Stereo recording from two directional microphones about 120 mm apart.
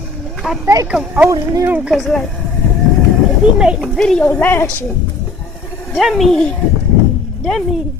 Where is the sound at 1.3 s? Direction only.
30° right (ahead or behind).